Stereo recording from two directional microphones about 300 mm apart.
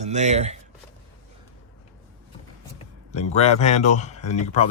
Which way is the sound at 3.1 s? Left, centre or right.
Left.